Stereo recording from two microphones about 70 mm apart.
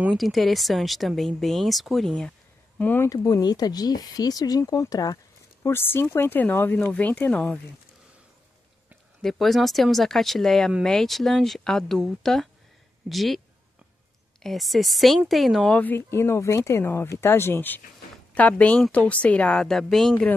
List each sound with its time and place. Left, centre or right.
0.2 s speech: centre
2.8 s speech: left
3.1 s speech: left
5.6 s speech: left
9.2 s speech: centre
14.4 s speech: centre
15.7 s speech: left
16.1 s speech: left; by 20.2 s centre